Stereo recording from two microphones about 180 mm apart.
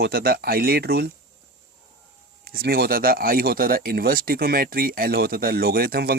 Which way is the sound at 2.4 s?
60° right (ahead or behind).